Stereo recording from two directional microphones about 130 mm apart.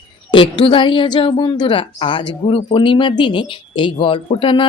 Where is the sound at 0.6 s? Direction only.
40° left (ahead or behind).